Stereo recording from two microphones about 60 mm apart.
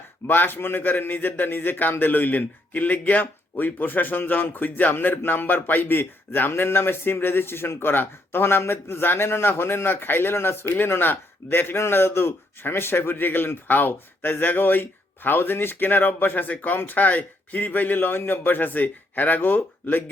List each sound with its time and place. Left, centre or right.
0.3 s speech: left